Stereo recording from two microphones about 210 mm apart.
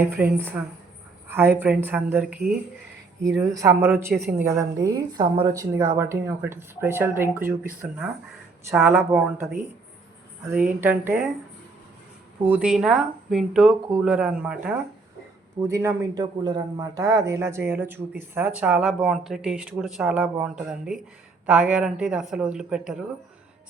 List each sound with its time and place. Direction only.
0.0 s a man's voice: 10° right (ahead or behind)
3.2 s a man's voice: 15° right (ahead or behind)
10.5 s a man's voice: 10° right (ahead or behind)
12.5 s a man's voice: 5° right (ahead or behind)